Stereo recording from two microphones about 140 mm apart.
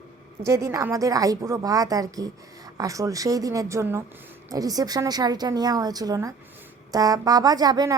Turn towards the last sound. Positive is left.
turn(degrees=-30)  # may be behind; listen again after turning